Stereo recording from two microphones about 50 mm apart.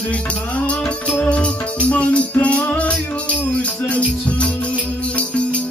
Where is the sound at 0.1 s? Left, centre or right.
Left.